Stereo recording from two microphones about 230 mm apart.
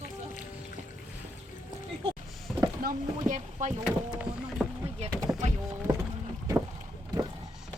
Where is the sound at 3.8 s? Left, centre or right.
Centre.